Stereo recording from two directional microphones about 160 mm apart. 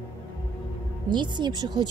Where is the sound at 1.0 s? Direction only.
30° right (ahead or behind).